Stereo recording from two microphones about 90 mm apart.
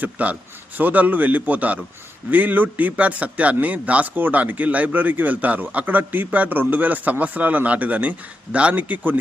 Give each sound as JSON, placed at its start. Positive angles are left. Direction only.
{"t": 0.0, "sound": "a man's voice", "side_deg": -15}